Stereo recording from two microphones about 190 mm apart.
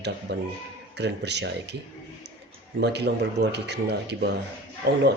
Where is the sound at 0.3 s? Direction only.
60° right (ahead or behind).